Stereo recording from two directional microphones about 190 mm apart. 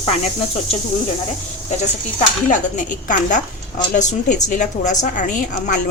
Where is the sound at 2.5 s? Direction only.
40° left (ahead or behind).